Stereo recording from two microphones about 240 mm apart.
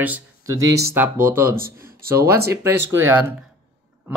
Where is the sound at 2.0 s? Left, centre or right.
Right.